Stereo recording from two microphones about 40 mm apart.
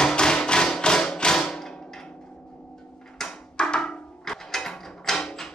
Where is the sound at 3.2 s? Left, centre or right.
Centre.